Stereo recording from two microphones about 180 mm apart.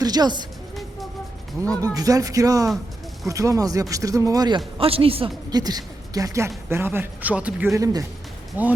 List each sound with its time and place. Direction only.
0.0 s a woman's voice: 20° right (ahead or behind)
1.7 s a man's voice: 20° right (ahead or behind)